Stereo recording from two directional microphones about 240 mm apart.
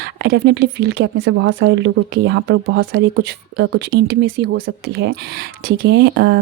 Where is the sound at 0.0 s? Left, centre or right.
Right.